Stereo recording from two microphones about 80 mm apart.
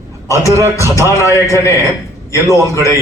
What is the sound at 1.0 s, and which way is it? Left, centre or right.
Speech, left.